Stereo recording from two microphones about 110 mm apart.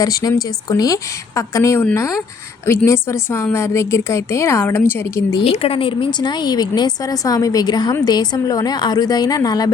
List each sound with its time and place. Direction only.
0.0 s a woman's voice: 35° left (ahead or behind)
5.3 s a woman's voice: 55° left (ahead or behind); by 9.7 s 35° left (ahead or behind)